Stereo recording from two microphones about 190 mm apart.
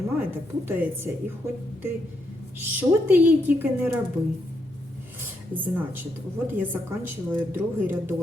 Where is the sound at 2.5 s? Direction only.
10° right (ahead or behind).